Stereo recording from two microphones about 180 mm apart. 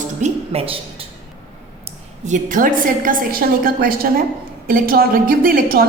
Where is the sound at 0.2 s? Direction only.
30° right (ahead or behind).